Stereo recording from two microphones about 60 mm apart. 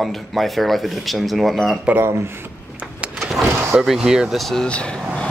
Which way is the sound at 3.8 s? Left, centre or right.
Centre.